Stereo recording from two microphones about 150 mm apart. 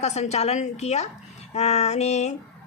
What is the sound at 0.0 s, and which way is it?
A woman's voice, 45° left (ahead or behind).